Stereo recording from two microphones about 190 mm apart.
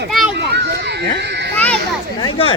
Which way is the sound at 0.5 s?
65° right (ahead or behind).